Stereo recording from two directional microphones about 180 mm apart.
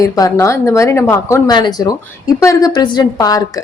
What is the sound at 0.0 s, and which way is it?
Speech, 20° left (ahead or behind).